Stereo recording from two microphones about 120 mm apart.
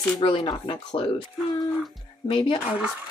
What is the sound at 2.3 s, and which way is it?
Speech, 45° left (ahead or behind).